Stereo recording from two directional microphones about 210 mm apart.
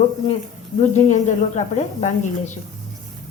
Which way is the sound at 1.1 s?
35° left (ahead or behind).